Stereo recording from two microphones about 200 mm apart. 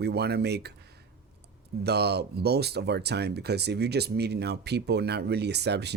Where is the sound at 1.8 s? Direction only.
55° right (ahead or behind).